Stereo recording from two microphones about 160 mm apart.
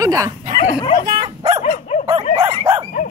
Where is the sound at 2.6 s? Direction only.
20° right (ahead or behind).